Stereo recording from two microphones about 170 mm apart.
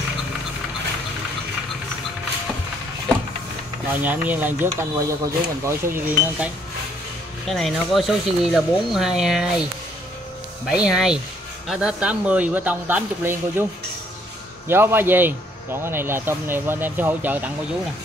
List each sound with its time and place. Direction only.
4.0 s speech: 10° right (ahead or behind)
7.4 s speech: centre (ahead or behind)
10.7 s speech: 5° right (ahead or behind)
14.7 s speech: 15° right (ahead or behind)